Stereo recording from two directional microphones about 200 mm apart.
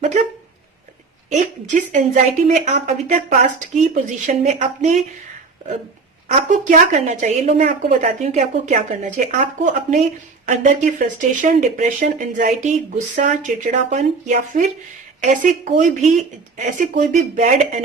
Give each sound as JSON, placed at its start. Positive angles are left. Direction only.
{"t": 1.3, "sound": "a woman's voice", "side_deg": -40}
{"t": 6.2, "sound": "a woman's voice", "side_deg": -40}